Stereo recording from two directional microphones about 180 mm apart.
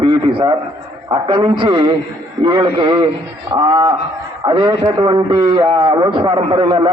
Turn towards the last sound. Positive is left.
turn(degrees=-25)  # may be behind; listen again after turning